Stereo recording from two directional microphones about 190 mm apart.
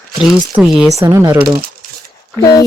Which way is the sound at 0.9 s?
15° right (ahead or behind).